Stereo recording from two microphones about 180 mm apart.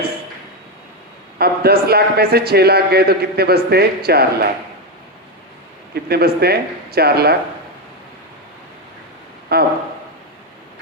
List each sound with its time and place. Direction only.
1.4 s a man's voice: 60° right (ahead or behind)
5.9 s a man's voice: 60° right (ahead or behind)
9.5 s a man's voice: 60° right (ahead or behind)